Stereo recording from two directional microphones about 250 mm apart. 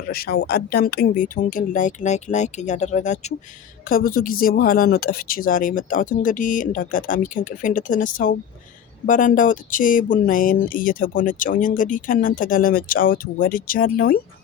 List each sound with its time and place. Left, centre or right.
0.1 s speech: left